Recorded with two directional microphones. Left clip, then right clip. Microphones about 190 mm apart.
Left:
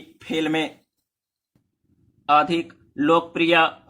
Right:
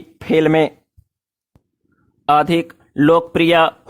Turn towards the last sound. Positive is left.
turn(degrees=-50)  # may be behind; listen again after turning